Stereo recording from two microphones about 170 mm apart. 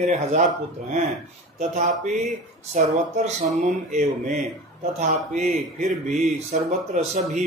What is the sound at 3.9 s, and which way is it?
Speech, 45° right (ahead or behind).